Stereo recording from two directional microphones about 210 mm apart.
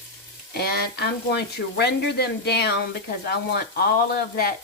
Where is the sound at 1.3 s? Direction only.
55° left (ahead or behind).